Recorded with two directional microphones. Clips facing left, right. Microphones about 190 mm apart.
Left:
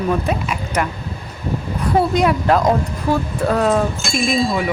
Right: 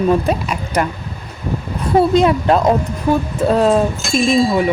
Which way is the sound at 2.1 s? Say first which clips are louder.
Right 3 dB; 25° right (ahead or behind).